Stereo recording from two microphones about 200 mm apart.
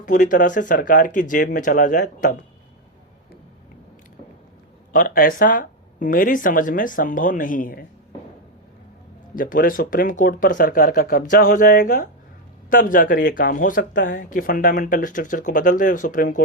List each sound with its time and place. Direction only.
0.0 s speech: 40° left (ahead or behind)
4.9 s speech: 45° left (ahead or behind)
9.3 s speech: 45° left (ahead or behind)